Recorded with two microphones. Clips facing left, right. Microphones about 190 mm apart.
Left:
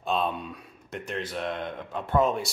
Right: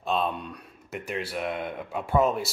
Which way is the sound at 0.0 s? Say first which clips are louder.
Even; centre (ahead or behind).